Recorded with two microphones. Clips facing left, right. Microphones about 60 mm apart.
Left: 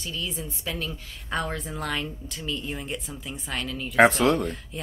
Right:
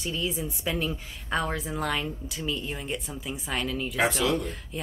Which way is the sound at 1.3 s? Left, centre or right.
Centre.